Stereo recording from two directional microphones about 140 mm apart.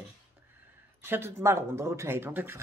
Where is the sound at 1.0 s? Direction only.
15° right (ahead or behind).